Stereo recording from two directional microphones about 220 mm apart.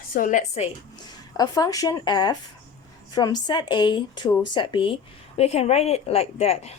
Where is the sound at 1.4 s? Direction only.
15° left (ahead or behind).